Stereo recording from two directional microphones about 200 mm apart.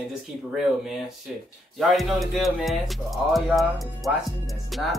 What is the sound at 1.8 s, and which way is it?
Speech, centre (ahead or behind).